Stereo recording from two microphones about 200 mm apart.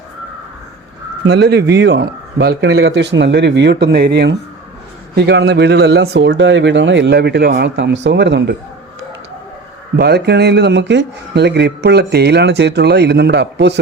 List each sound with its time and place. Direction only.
1.3 s speech: 55° right (ahead or behind)
10.0 s speech: 55° right (ahead or behind)